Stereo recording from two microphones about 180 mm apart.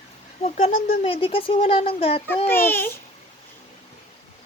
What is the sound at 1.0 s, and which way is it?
A child's voice, 30° left (ahead or behind).